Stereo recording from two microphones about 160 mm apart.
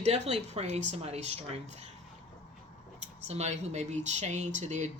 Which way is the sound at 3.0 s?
45° right (ahead or behind).